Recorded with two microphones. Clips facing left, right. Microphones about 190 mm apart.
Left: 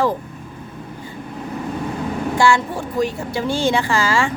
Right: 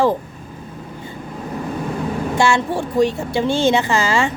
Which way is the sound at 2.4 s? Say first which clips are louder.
Even; 25° right (ahead or behind).